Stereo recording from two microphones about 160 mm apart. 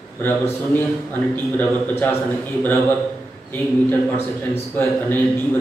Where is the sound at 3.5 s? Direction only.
10° left (ahead or behind).